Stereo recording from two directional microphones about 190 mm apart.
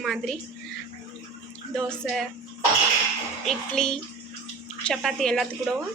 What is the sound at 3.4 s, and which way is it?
A woman's voice, 5° left (ahead or behind).